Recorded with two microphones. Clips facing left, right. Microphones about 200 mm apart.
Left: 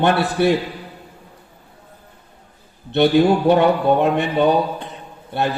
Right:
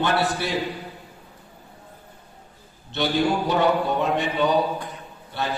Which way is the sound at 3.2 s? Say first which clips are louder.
Left 7 dB; 60° left (ahead or behind).